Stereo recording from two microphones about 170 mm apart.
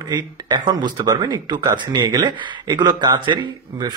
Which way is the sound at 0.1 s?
25° right (ahead or behind).